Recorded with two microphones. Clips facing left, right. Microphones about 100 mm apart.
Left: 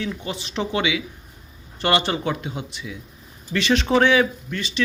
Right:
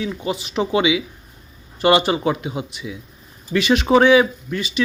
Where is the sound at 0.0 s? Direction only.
15° right (ahead or behind).